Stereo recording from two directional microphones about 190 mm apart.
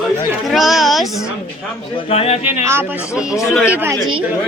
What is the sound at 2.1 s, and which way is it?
Speech, 30° left (ahead or behind).